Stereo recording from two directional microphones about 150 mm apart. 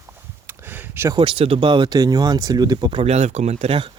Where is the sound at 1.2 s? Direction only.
35° right (ahead or behind).